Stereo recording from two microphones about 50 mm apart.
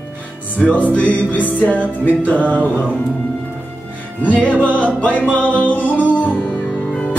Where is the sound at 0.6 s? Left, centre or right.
Centre.